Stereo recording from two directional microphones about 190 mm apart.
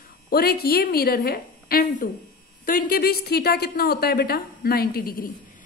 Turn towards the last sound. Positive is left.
turn(degrees=50)  # may be behind; listen again after turning